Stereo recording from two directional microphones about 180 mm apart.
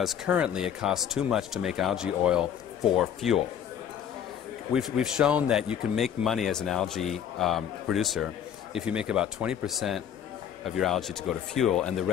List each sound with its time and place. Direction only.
0.0 s speech: centre (ahead or behind)
4.7 s speech: centre (ahead or behind)